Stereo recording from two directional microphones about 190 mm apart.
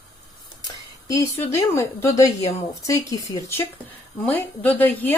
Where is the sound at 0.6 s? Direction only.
20° left (ahead or behind).